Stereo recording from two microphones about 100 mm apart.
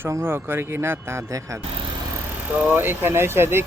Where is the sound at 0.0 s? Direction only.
25° right (ahead or behind).